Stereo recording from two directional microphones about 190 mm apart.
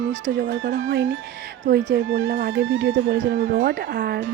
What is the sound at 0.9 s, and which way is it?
Speech, 90° right.